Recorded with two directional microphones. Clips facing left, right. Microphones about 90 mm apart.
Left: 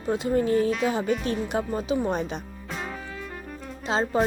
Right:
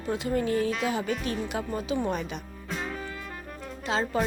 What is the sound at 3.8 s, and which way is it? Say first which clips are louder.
Speech: left 3 dB; 25° left (ahead or behind).